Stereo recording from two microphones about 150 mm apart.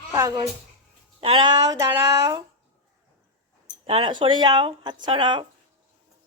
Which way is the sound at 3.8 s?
35° right (ahead or behind).